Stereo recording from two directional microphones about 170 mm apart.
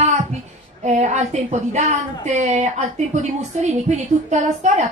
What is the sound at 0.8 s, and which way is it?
A woman's voice, 40° right (ahead or behind).